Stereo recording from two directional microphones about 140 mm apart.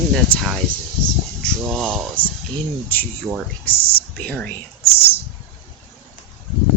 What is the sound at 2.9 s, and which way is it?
Speech, 15° left (ahead or behind).